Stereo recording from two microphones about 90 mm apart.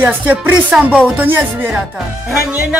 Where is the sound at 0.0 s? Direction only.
20° right (ahead or behind).